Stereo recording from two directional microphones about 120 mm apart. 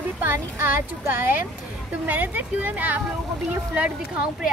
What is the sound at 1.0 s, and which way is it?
A woman's voice, 15° right (ahead or behind).